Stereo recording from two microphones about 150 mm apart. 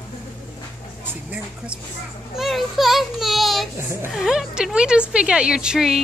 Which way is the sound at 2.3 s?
Centre (ahead or behind).